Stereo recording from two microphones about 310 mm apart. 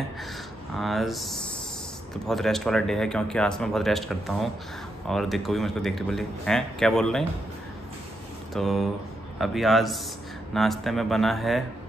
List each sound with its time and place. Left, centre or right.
0.7 s speech: centre
8.5 s speech: centre